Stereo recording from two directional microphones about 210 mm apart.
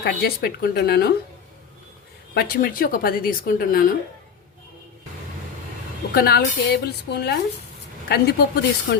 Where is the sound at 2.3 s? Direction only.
45° left (ahead or behind).